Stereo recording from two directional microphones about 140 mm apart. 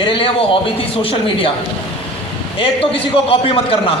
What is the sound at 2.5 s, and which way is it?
A man's voice, 40° left (ahead or behind).